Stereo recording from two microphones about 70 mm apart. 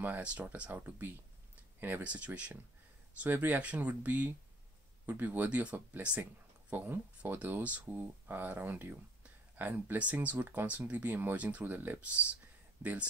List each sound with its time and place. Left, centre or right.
0.0 s speech: right
2.0 s speech: centre